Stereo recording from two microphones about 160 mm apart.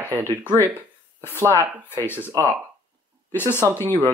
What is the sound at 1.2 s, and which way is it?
Speech, 15° left (ahead or behind).